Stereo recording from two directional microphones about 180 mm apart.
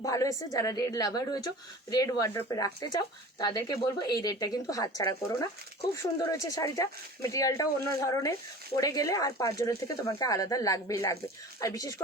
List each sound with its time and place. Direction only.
0.0 s speech: 20° left (ahead or behind)